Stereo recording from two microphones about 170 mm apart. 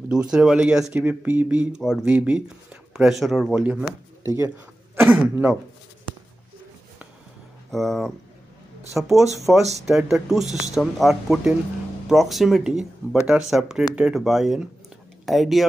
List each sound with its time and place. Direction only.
0.1 s speech: 5° right (ahead or behind)
4.2 s speech: 15° right (ahead or behind)
7.7 s speech: centre (ahead or behind)